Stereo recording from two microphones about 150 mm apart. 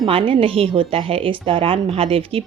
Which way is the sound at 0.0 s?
35° right (ahead or behind).